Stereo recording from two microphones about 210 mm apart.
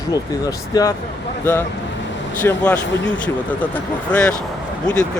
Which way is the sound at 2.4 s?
5° left (ahead or behind).